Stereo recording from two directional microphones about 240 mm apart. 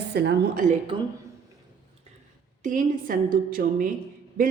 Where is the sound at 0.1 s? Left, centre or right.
Right.